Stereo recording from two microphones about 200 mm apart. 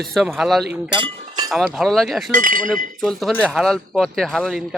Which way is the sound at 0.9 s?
25° right (ahead or behind).